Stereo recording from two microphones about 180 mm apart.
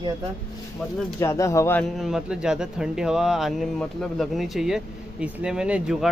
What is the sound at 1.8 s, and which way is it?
Speech, centre (ahead or behind).